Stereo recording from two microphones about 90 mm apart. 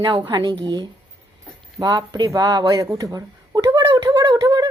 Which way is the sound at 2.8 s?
45° right (ahead or behind).